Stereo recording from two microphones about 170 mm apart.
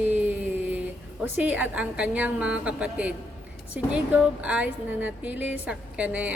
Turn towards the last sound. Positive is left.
turn(degrees=-10)  # may be behind; listen again after turning